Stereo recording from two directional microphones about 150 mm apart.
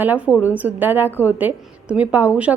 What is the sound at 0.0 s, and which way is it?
A woman's voice, 10° right (ahead or behind).